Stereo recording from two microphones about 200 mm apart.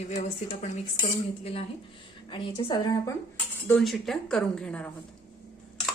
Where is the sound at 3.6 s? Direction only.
Centre (ahead or behind).